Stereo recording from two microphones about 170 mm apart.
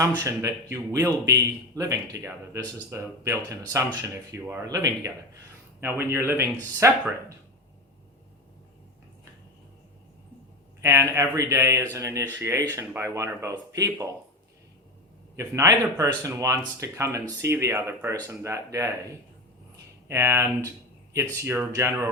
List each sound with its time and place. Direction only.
0.2 s a man's voice: 15° right (ahead or behind)
10.8 s speech: 15° right (ahead or behind)
15.4 s speech: 20° right (ahead or behind)
20.1 s speech: 15° right (ahead or behind)